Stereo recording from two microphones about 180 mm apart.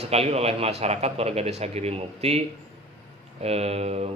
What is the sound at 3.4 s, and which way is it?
Speech, 35° right (ahead or behind).